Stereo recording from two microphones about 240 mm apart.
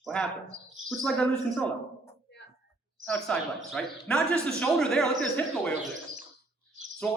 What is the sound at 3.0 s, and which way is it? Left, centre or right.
A man's voice, centre.